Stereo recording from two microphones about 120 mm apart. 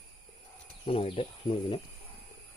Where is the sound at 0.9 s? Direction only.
50° left (ahead or behind).